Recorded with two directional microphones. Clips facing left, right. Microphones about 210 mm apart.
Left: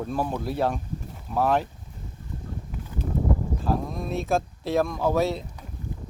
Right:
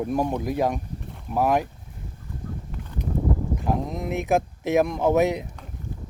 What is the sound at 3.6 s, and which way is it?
Speech, 20° right (ahead or behind).